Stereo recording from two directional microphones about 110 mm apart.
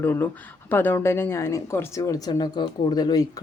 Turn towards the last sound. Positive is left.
turn(degrees=40)  # may be behind; listen again after turning